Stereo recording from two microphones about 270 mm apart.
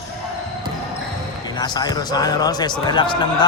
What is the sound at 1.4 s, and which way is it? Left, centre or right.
Speech, centre.